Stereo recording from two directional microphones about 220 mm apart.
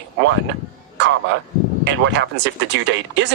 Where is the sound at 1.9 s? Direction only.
55° right (ahead or behind).